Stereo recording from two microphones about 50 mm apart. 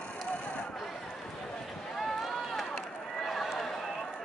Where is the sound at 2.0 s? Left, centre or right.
Centre.